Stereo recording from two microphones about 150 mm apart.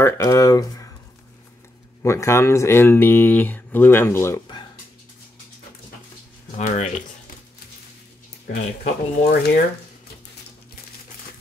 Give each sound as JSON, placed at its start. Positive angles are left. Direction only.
{"t": 0.0, "sound": "speech", "side_deg": 25}
{"t": 2.0, "sound": "speech", "side_deg": 20}
{"t": 6.5, "sound": "speech", "side_deg": 50}
{"t": 8.5, "sound": "speech", "side_deg": 90}